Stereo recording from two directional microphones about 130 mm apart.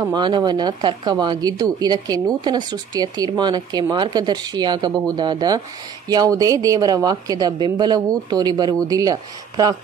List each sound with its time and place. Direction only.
0.0 s a woman's voice: 35° right (ahead or behind)